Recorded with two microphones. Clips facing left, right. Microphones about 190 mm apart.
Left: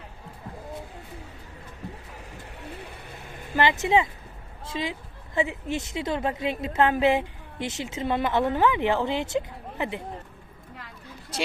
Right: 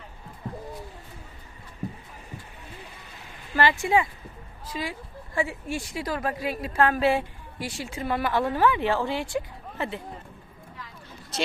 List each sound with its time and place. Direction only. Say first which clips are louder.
3.5 s a woman's voice: left 1 dB; 20° left (ahead or behind)